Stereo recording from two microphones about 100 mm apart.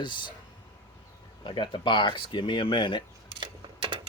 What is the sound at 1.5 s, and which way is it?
Speech, 55° left (ahead or behind).